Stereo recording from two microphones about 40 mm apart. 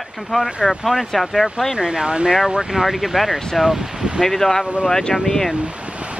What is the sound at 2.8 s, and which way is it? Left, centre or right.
Speech, centre.